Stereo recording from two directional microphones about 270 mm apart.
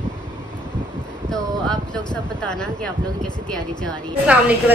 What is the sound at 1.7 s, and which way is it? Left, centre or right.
Speech, centre.